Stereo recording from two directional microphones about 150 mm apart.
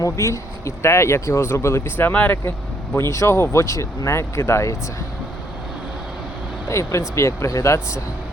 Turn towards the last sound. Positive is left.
turn(degrees=20)  # may be behind; listen again after turning